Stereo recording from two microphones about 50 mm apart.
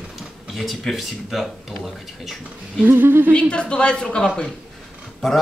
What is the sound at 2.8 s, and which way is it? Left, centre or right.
Speech, right.